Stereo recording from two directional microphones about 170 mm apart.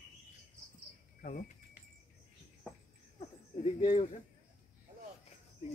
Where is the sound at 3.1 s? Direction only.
35° left (ahead or behind).